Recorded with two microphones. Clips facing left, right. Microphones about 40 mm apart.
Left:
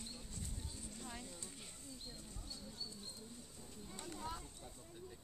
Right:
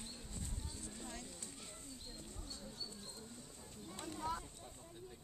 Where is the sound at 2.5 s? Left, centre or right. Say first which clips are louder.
Even; right.